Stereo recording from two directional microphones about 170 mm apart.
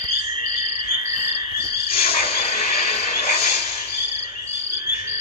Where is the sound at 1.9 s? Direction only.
35° left (ahead or behind).